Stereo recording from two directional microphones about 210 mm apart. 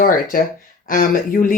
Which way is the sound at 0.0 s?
40° left (ahead or behind).